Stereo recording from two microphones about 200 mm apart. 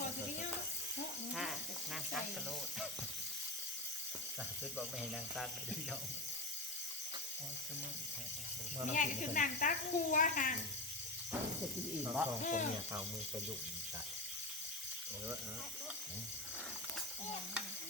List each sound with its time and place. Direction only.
1.3 s a sound: centre (ahead or behind)
8.9 s speech: 40° left (ahead or behind)
12.0 s speech: 10° right (ahead or behind)
12.4 s speech: 40° left (ahead or behind)